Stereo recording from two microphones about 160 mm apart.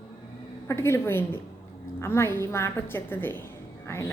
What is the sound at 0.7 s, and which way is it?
A woman's voice, 15° left (ahead or behind).